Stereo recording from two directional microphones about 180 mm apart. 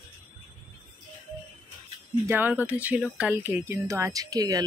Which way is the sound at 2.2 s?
10° right (ahead or behind).